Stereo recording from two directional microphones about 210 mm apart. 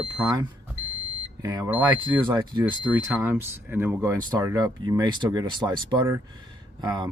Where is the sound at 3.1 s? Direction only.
10° right (ahead or behind).